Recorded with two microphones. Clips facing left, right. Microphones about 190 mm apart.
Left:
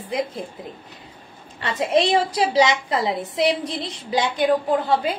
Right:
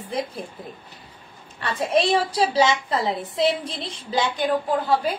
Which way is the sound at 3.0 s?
20° left (ahead or behind).